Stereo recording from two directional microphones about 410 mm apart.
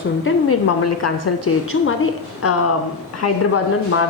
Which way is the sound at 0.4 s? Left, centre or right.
Left.